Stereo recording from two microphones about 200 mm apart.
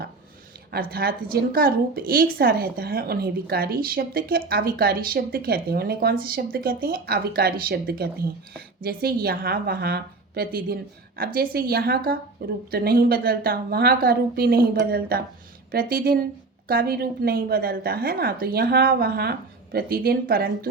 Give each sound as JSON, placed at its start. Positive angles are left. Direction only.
{"t": 0.7, "sound": "a woman's voice", "side_deg": -50}